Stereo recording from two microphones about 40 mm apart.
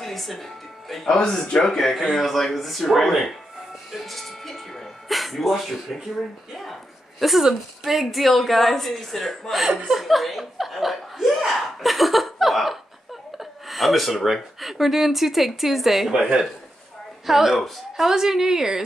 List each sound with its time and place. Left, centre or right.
0.0 s music: centre
1.0 s speech: centre
1.8 s speech: centre
3.9 s music: centre
6.5 s a sound: centre
7.4 s speech: centre
13.4 s a sound: centre
14.2 s speech: centre
17.3 s a woman's voice: centre